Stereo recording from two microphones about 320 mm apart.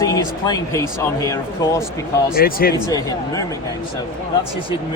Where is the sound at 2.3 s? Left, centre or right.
Left.